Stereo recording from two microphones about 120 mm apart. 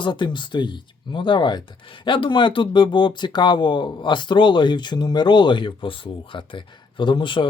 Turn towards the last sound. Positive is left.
turn(degrees=45)  # may be behind; listen again after turning